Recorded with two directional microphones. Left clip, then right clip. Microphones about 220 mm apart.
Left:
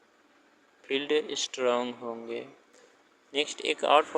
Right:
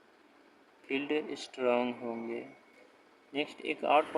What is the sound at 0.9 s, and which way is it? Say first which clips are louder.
Speech: left 6 dB; 15° left (ahead or behind).